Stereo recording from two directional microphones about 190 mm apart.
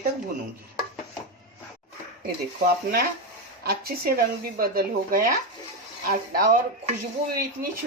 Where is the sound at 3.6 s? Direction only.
55° right (ahead or behind).